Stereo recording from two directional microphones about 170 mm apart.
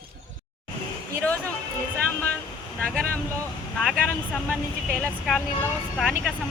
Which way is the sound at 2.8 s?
5° left (ahead or behind).